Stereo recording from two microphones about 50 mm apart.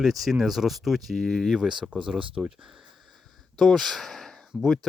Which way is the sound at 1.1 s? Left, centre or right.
Centre.